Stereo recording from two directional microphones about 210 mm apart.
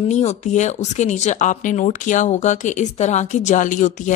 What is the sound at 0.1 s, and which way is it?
Speech, 35° left (ahead or behind).